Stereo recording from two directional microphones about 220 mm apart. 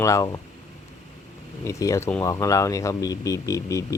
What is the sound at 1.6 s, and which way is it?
Speech, 15° left (ahead or behind).